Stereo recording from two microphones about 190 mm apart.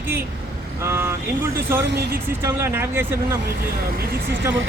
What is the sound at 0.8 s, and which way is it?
Speech, 15° right (ahead or behind).